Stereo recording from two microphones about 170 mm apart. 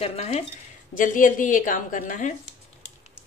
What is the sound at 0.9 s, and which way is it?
A woman's voice, 50° left (ahead or behind).